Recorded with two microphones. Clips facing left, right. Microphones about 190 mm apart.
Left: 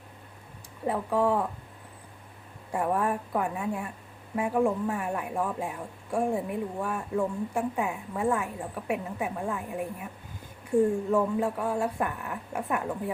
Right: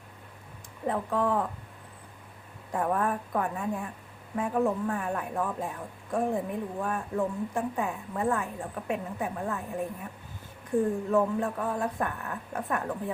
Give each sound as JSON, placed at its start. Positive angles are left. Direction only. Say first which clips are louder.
{"t": 0.9, "sound": "speech", "louder": "left 2 dB", "side_deg": 10}
{"t": 2.7, "sound": "speech", "louder": "left 1 dB", "side_deg": 10}
{"t": 10.7, "sound": "speech", "louder": "left 3 dB", "side_deg": 25}
{"t": 11.1, "sound": "speech", "louder": "even", "side_deg": 10}